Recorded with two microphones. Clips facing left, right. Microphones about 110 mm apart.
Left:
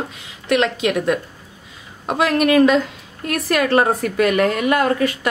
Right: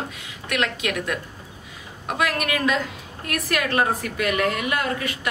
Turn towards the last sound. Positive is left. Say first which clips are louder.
# left 8 dB
turn(degrees=40)  # may be behind; listen again after turning